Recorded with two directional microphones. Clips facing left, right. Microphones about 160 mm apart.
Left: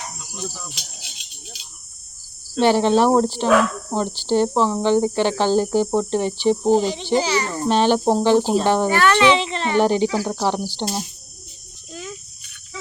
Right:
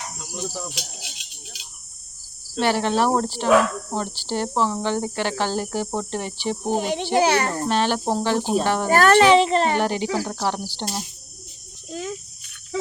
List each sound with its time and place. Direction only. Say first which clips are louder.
2.6 s speech: left 5 dB; 25° left (ahead or behind)
6.7 s a child's voice: left 2 dB; 55° right (ahead or behind)
7.7 s speech: left 7 dB; 25° left (ahead or behind)
8.9 s a child's voice: right 5 dB; 45° right (ahead or behind)
9.7 s speech: left 5 dB; 25° left (ahead or behind)
11.9 s cricket: right 4 dB; 40° right (ahead or behind)